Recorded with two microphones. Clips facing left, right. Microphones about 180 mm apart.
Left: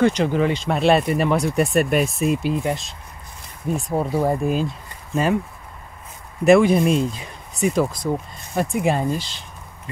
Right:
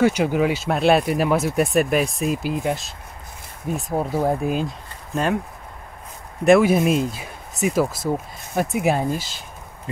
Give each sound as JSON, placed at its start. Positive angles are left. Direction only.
{"t": 0.0, "sound": "speech", "side_deg": -10}
{"t": 6.4, "sound": "speech", "side_deg": 0}